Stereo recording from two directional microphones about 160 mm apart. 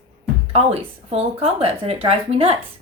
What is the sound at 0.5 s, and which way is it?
Speech, 40° right (ahead or behind).